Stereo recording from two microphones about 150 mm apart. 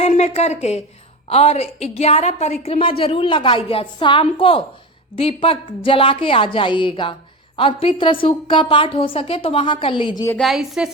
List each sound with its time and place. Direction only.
0.0 s a woman's voice: 45° left (ahead or behind)
10.4 s a woman's voice: centre (ahead or behind)